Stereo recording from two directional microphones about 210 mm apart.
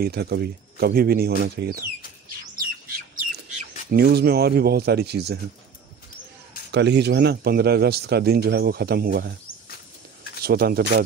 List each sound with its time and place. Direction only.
0.0 s a man's voice: 50° right (ahead or behind)
3.9 s a man's voice: 50° right (ahead or behind)
6.7 s a man's voice: 55° right (ahead or behind)
10.4 s a man's voice: 45° right (ahead or behind)